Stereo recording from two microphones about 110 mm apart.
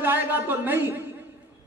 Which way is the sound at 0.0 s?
20° right (ahead or behind).